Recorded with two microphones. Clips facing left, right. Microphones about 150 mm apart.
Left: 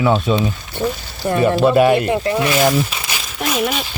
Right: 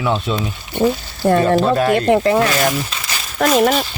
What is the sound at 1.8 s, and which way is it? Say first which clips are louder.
Speech: left 3 dB; 10° left (ahead or behind).